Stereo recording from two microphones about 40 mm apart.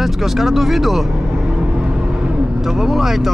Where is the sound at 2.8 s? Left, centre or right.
Centre.